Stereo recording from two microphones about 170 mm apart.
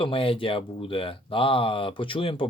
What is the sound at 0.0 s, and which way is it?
Speech, 30° left (ahead or behind).